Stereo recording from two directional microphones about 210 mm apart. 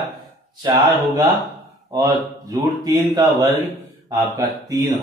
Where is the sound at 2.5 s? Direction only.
15° right (ahead or behind).